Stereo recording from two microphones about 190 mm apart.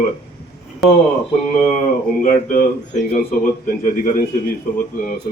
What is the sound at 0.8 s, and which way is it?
Speech, centre (ahead or behind).